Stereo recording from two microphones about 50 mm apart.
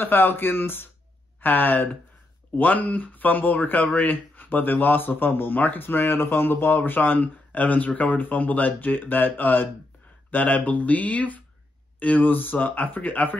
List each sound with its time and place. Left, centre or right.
0.0 s speech: left